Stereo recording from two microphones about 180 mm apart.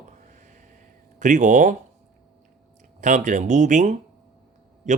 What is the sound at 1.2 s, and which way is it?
Speech, 45° right (ahead or behind).